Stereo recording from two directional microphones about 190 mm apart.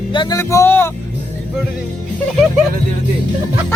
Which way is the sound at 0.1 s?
25° left (ahead or behind).